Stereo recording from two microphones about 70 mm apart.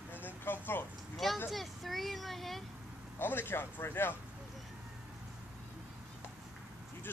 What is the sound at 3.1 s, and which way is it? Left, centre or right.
Speech, left.